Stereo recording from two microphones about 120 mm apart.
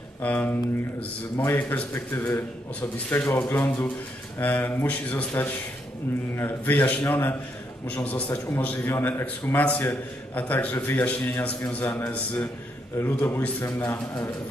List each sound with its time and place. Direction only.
0.2 s a man's voice: 15° left (ahead or behind)